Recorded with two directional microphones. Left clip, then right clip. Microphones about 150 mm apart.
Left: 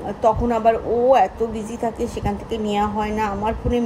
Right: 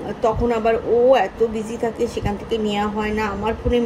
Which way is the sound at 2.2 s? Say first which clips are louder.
Right 2 dB; 20° left (ahead or behind).